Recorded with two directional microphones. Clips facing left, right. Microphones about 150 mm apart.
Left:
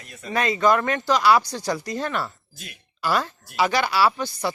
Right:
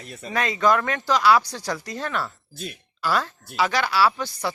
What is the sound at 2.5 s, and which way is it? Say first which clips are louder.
Speech: right 9 dB; 30° right (ahead or behind).